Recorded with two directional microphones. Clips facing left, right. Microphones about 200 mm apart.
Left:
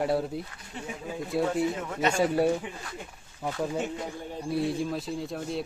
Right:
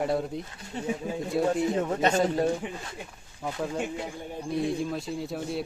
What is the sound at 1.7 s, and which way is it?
Speech, 35° right (ahead or behind).